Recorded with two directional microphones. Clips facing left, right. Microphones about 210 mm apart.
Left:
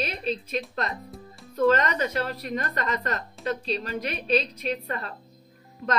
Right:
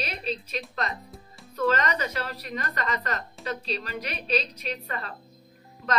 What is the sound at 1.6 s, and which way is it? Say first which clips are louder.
A woman's voice: left 4 dB; 50° left (ahead or behind).